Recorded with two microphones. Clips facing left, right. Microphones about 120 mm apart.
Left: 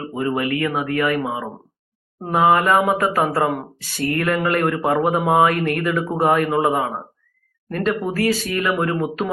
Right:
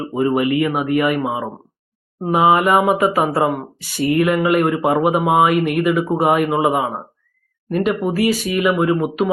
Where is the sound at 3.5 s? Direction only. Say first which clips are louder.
Right 3 dB; 5° right (ahead or behind).